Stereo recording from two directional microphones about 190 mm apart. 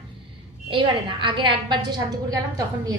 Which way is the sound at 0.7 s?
25° right (ahead or behind).